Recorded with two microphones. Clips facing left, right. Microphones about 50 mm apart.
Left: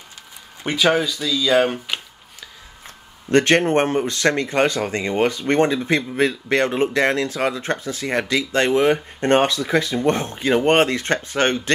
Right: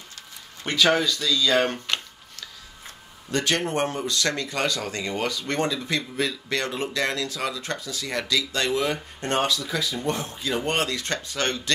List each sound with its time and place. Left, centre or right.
0.7 s speech: centre
3.3 s speech: left